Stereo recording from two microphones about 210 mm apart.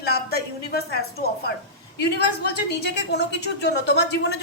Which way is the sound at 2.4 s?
55° left (ahead or behind).